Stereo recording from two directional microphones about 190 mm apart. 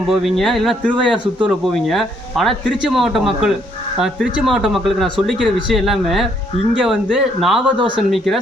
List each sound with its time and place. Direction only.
0.1 s speech: centre (ahead or behind)